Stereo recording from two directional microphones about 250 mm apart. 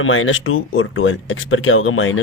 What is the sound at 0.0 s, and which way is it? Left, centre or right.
Speech, left.